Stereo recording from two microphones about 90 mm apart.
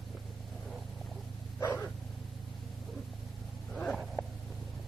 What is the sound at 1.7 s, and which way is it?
Dog, 20° left (ahead or behind).